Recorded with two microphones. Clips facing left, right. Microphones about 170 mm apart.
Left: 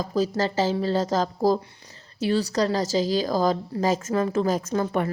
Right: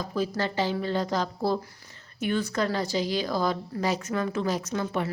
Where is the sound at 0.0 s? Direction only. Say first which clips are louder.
Left 4 dB; 40° left (ahead or behind).